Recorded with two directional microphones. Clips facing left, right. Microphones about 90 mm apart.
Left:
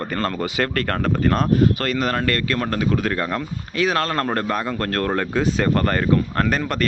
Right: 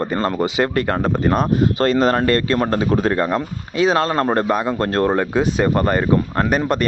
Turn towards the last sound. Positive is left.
turn(degrees=-20)  # may be behind; listen again after turning